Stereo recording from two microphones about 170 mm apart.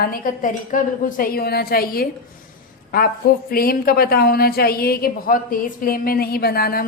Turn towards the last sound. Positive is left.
turn(degrees=65)  # may be behind; listen again after turning